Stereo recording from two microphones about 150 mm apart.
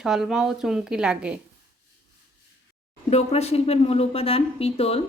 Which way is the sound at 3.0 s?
45° left (ahead or behind).